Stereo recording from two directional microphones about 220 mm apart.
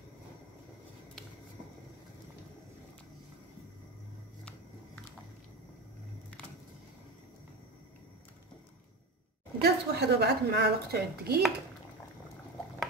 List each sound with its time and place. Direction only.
9.6 s a woman's voice: 45° right (ahead or behind)